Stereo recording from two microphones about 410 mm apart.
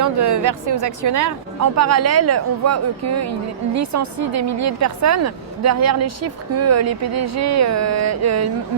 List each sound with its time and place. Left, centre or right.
0.0 s a woman's voice: right